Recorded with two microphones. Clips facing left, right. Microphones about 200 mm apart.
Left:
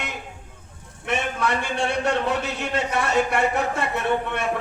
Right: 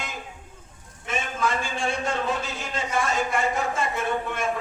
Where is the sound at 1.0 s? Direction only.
65° left (ahead or behind).